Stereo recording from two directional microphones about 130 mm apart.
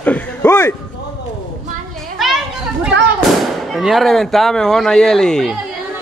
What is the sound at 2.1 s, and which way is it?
Children playing, centre (ahead or behind).